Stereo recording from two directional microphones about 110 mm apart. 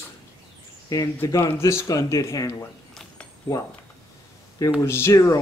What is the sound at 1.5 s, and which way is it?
Speech, 25° left (ahead or behind).